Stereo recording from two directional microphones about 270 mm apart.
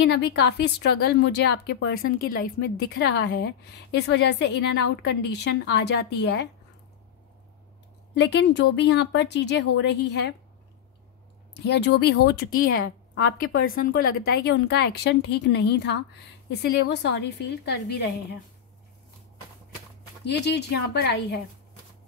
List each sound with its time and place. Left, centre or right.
0.1 s a woman's voice: left
8.1 s a woman's voice: left
11.6 s a woman's voice: left
20.2 s a woman's voice: left